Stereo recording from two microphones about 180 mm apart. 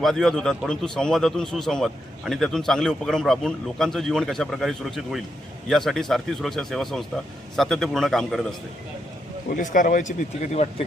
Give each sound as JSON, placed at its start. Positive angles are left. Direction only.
{"t": 0.0, "sound": "a man's voice", "side_deg": 0}
{"t": 9.6, "sound": "speech", "side_deg": 45}